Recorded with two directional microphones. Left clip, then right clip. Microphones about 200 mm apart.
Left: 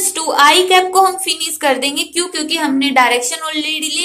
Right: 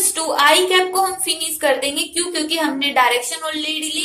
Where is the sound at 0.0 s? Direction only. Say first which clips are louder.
Left 4 dB; 30° left (ahead or behind).